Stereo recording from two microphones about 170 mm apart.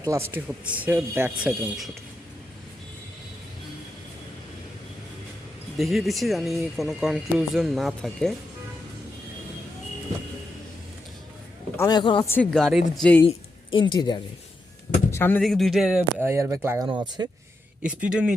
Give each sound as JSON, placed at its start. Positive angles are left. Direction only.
{"t": 0.0, "sound": "speech", "side_deg": -15}
{"t": 5.7, "sound": "speech", "side_deg": 0}
{"t": 11.8, "sound": "speech", "side_deg": 25}
{"t": 12.2, "sound": "speech", "side_deg": 10}
{"t": 13.2, "sound": "speech", "side_deg": 30}
{"t": 15.1, "sound": "a sound", "side_deg": 10}
{"t": 15.4, "sound": "speech", "side_deg": 0}
{"t": 16.2, "sound": "speech", "side_deg": -15}
{"t": 17.8, "sound": "speech", "side_deg": -5}